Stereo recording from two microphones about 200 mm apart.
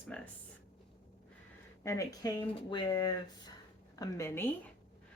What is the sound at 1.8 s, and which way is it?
Speech, 15° left (ahead or behind).